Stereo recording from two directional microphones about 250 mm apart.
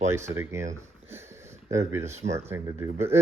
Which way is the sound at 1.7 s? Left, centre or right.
Centre.